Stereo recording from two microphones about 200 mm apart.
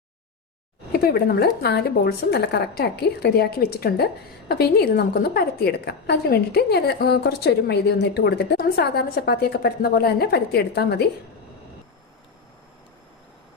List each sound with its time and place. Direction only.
0.9 s a woman's voice: 50° left (ahead or behind)